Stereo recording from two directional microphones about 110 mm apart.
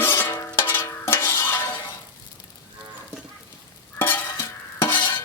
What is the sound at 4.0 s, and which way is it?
Stir, 15° left (ahead or behind).